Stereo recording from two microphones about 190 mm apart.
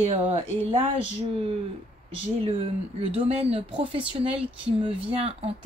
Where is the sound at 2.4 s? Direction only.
30° right (ahead or behind).